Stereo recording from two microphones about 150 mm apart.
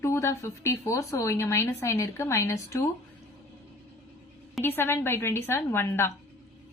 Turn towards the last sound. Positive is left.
turn(degrees=15)  # may be behind; listen again after turning